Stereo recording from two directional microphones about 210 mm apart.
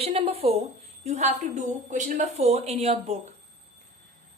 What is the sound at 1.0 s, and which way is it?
A woman's voice, 35° right (ahead or behind).